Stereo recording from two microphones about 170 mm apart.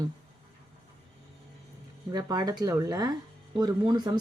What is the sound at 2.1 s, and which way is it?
Speech, 25° right (ahead or behind).